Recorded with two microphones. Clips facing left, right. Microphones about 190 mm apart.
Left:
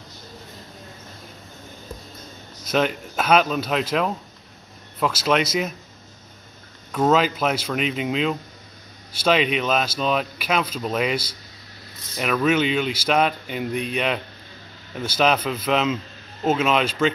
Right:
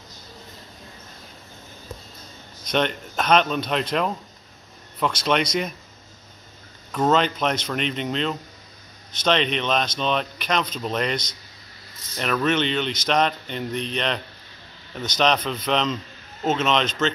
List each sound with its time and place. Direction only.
2.6 s speech: 5° left (ahead or behind)
6.9 s speech: 5° left (ahead or behind)